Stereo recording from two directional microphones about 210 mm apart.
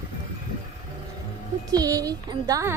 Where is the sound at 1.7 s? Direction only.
15° right (ahead or behind).